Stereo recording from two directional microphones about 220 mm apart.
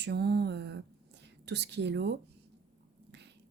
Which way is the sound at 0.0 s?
50° right (ahead or behind).